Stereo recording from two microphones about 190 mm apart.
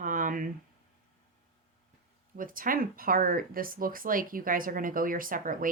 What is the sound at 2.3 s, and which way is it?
Speech, 45° right (ahead or behind).